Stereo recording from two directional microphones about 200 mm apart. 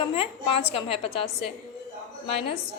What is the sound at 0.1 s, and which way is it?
A woman's voice, 30° left (ahead or behind).